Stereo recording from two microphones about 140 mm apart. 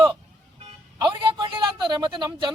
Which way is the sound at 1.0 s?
35° right (ahead or behind).